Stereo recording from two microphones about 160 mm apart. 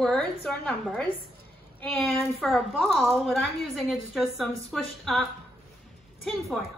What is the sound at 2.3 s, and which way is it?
A woman's voice, centre (ahead or behind).